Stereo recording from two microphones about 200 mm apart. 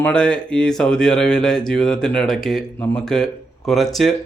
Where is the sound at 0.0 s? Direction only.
5° left (ahead or behind).